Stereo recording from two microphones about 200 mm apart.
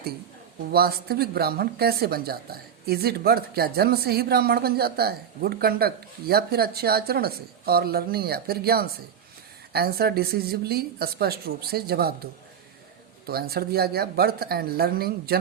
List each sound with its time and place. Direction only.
0.7 s speech: 50° right (ahead or behind)